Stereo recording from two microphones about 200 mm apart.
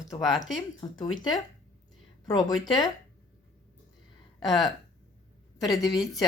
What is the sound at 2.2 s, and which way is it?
Speech, 20° left (ahead or behind).